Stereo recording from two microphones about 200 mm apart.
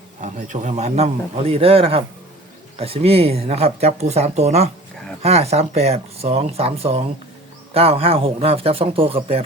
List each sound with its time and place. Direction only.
0.2 s a man's voice: 35° right (ahead or behind)